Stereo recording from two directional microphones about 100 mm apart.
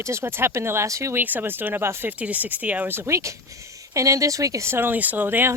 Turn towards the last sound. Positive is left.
turn(degrees=-20)  # may be behind; listen again after turning